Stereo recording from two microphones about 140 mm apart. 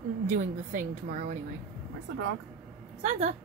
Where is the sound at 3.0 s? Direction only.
55° right (ahead or behind).